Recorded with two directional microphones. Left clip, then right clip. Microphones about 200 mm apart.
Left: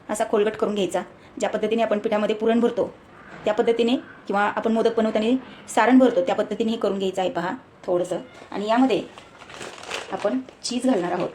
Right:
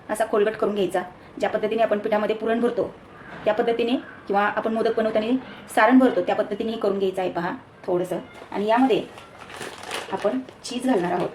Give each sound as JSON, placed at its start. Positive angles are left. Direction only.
{"t": 0.1, "sound": "speech", "side_deg": 35}
{"t": 10.2, "sound": "speech", "side_deg": 30}